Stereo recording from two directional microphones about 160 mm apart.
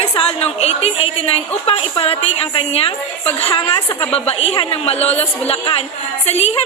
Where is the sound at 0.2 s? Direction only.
40° left (ahead or behind).